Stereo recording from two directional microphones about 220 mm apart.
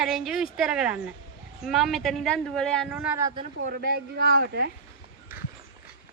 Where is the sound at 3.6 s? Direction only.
45° right (ahead or behind).